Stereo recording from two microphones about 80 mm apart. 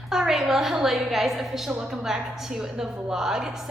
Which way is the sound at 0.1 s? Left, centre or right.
Centre.